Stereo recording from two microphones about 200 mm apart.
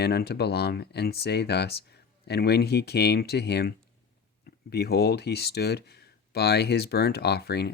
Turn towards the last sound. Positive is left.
turn(degrees=55)  # may be behind; listen again after turning